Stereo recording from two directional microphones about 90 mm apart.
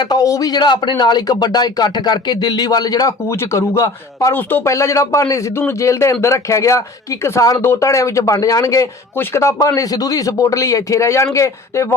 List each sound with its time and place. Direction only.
0.0 s speech: 55° left (ahead or behind); by 11.9 s 35° left (ahead or behind)